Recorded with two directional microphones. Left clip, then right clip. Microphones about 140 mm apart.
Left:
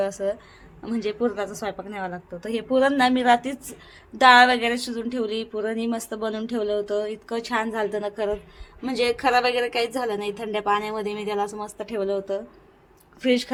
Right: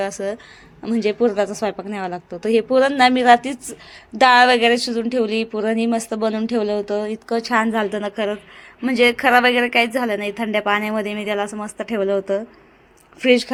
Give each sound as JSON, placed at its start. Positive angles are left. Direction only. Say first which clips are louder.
{"t": 0.0, "sound": "a woman's voice", "louder": "right 1 dB", "side_deg": -40}